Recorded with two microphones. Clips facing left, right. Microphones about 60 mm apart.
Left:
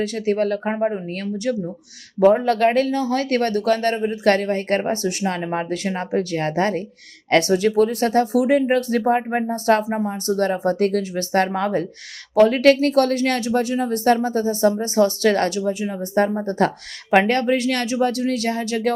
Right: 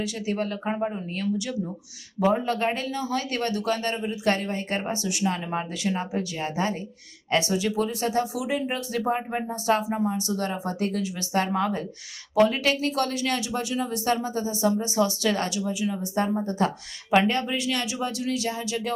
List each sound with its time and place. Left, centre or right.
0.0 s speech: left
0.7 s speech: left
1.1 s speech: left
9.9 s speech: left